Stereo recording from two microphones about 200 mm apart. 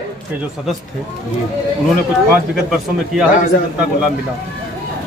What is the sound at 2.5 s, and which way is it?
Speech, 5° right (ahead or behind).